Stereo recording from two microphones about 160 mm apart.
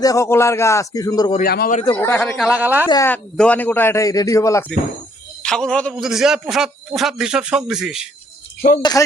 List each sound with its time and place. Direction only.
0.0 s a man's voice: 20° left (ahead or behind)
1.4 s a man's voice: 70° left (ahead or behind)
1.7 s a man's voice: 35° left (ahead or behind)
2.0 s a man's voice: 10° left (ahead or behind); by 2.8 s 10° right (ahead or behind)
3.1 s a man's voice: 5° left (ahead or behind)
5.4 s a man's voice: 5° left (ahead or behind)
8.8 s a man's voice: 25° left (ahead or behind)